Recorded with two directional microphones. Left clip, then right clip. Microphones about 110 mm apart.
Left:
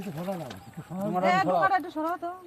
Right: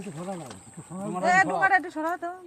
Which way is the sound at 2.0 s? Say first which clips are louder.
Right 1 dB; 30° right (ahead or behind).